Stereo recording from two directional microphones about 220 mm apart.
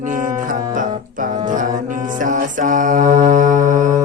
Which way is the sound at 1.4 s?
35° right (ahead or behind).